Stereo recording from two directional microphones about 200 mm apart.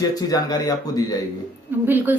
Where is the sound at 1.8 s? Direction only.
10° right (ahead or behind).